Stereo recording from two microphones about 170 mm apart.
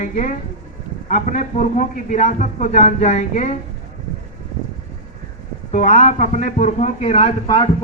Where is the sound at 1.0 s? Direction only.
50° left (ahead or behind).